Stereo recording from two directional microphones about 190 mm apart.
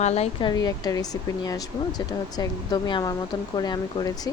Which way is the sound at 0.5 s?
20° left (ahead or behind).